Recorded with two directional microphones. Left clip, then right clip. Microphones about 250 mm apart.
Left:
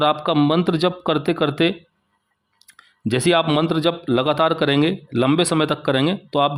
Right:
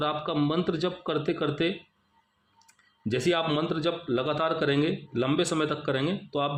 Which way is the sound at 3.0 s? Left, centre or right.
Left.